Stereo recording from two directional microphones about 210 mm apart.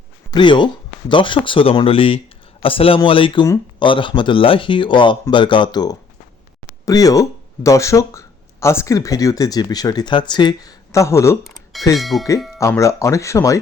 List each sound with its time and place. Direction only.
0.3 s speech: 20° left (ahead or behind)
11.4 s music: centre (ahead or behind)
11.9 s speech: centre (ahead or behind)
12.5 s speech: 15° left (ahead or behind)